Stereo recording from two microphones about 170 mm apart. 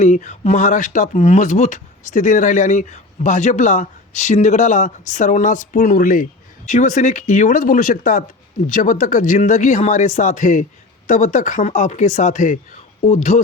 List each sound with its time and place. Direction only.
0.0 s speech: 45° left (ahead or behind)